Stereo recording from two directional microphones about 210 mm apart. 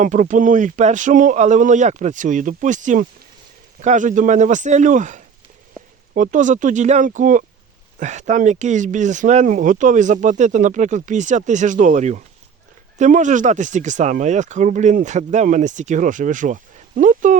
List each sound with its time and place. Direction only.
0.0 s speech: 35° right (ahead or behind)